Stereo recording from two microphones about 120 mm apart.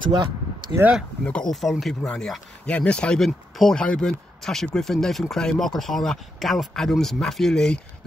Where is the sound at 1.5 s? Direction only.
Centre (ahead or behind).